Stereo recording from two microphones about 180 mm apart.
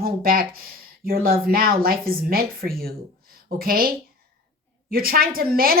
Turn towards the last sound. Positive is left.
turn(degrees=-55)  # may be behind; listen again after turning